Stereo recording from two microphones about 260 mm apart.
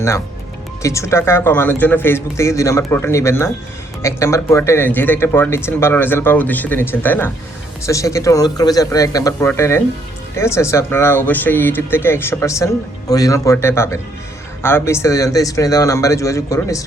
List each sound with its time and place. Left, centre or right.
0.8 s speech: centre